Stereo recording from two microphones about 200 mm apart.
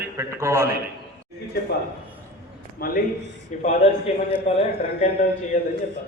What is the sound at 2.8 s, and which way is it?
Speech, 50° left (ahead or behind).